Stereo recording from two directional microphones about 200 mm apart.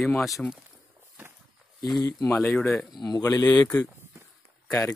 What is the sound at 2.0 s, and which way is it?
Speech, 10° left (ahead or behind).